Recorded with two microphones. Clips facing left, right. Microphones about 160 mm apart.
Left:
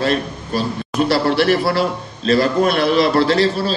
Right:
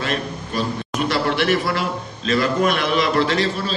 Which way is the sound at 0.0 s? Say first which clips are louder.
Left 5 dB; 35° left (ahead or behind).